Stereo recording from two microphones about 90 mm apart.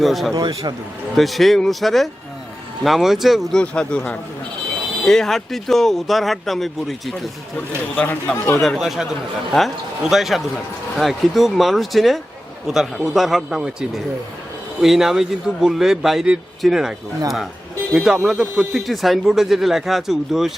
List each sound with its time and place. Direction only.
0.0 s speech: centre (ahead or behind)
0.3 s speech: 50° right (ahead or behind)
1.1 s speech: centre (ahead or behind)
3.6 s a man's voice: 10° left (ahead or behind)
7.9 s a man's voice: 10° left (ahead or behind)
8.6 s speech: centre (ahead or behind)
17.9 s speech: 5° right (ahead or behind)